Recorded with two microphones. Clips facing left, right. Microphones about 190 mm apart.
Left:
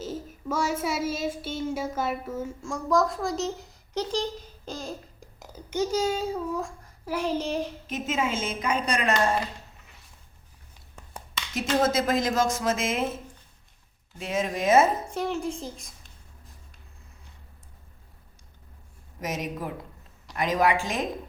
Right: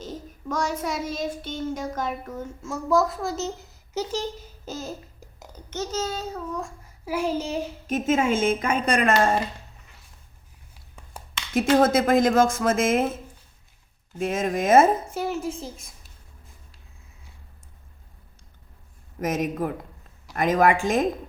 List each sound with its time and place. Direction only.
0.0 s child singing: 5° left (ahead or behind)
5.7 s a child's voice: 10° left (ahead or behind)
6.6 s a child's voice: 5° right (ahead or behind)
7.9 s speech: 50° right (ahead or behind)
11.5 s speech: 55° right (ahead or behind)
14.2 s speech: 50° right (ahead or behind)
15.1 s a child's voice: 5° right (ahead or behind)
19.2 s speech: 50° right (ahead or behind)